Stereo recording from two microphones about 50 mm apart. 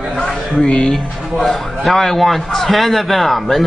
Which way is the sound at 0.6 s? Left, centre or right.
Centre.